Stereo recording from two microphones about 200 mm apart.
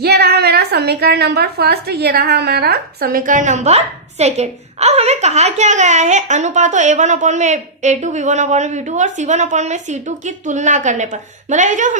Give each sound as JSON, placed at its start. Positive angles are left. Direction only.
{"t": 0.0, "sound": "a woman's voice", "side_deg": -55}